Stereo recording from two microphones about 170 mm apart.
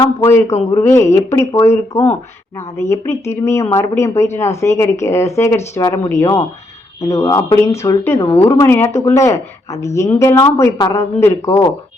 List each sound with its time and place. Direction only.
0.0 s speech: 15° left (ahead or behind)